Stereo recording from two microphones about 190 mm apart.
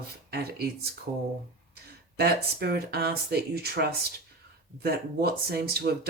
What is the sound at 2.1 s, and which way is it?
Speech, 55° right (ahead or behind).